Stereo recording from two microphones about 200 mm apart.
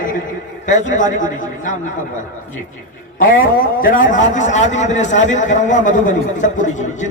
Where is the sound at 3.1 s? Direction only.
45° left (ahead or behind).